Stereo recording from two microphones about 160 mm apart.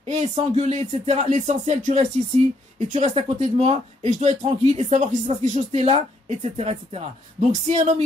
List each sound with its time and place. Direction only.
0.1 s speech: 45° right (ahead or behind)